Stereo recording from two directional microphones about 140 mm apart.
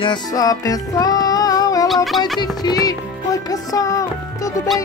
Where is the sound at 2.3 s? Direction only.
30° left (ahead or behind).